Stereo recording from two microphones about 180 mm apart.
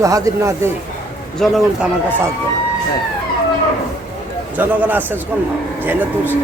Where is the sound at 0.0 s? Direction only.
20° right (ahead or behind).